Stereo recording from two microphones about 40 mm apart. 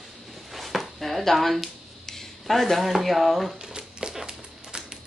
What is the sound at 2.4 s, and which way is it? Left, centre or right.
Speech, centre.